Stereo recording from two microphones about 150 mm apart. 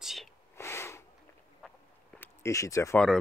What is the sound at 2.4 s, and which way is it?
Speech, 20° left (ahead or behind).